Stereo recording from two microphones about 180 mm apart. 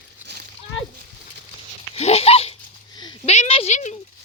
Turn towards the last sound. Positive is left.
turn(degrees=40)  # may be behind; listen again after turning